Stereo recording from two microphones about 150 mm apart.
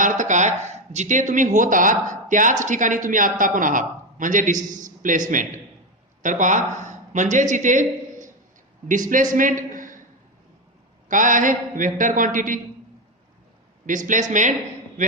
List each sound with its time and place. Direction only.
0.0 s a woman's voice: 60° right (ahead or behind)
11.1 s speech: 60° right (ahead or behind)
13.8 s speech: 60° right (ahead or behind)